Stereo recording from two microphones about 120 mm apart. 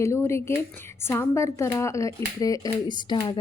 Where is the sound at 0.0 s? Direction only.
20° left (ahead or behind).